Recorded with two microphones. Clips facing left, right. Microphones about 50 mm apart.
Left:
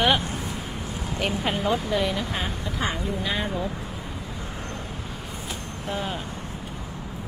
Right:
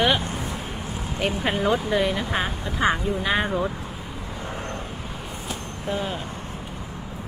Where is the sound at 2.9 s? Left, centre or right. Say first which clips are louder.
Right 7 dB; right.